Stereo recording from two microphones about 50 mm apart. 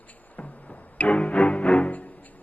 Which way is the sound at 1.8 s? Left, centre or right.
Left.